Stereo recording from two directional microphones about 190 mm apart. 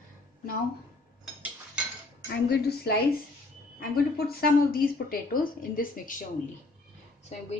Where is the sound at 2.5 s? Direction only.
60° left (ahead or behind).